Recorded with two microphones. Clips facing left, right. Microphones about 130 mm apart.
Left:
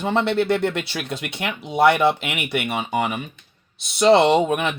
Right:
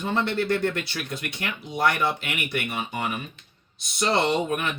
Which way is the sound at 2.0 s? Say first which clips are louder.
Left 7 dB; 70° left (ahead or behind).